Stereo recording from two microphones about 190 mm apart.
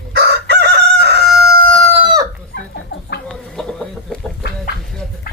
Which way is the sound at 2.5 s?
70° left (ahead or behind).